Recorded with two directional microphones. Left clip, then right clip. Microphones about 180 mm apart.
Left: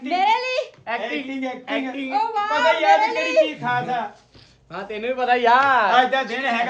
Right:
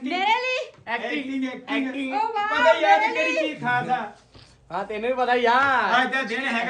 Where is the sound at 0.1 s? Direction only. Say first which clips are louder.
Left 3 dB; 30° left (ahead or behind).